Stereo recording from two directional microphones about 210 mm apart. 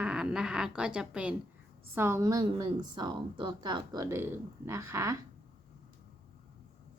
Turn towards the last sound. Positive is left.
turn(degrees=-10)  # may be behind; listen again after turning